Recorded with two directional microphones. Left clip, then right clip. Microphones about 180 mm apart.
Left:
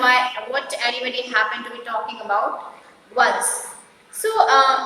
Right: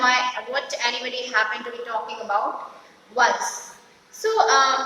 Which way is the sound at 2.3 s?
20° left (ahead or behind).